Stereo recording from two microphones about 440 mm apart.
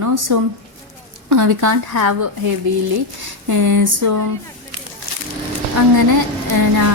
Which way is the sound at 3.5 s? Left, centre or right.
Right.